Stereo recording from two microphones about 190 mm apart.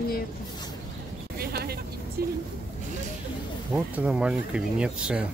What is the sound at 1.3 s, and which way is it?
Vehicle, 55° right (ahead or behind).